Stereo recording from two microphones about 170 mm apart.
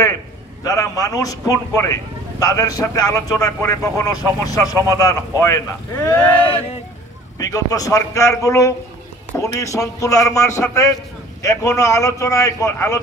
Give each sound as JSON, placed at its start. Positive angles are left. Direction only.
{"t": 0.7, "sound": "a man's voice", "side_deg": 20}
{"t": 6.0, "sound": "a man's voice", "side_deg": 10}
{"t": 7.3, "sound": "a man's voice", "side_deg": 20}